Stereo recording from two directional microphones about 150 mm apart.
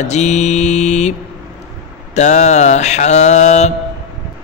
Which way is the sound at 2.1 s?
50° left (ahead or behind).